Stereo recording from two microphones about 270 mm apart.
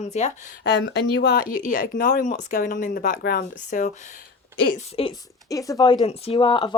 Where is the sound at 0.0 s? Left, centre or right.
Left.